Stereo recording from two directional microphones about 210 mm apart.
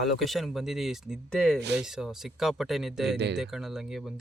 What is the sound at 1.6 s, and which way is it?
Speech, 55° right (ahead or behind).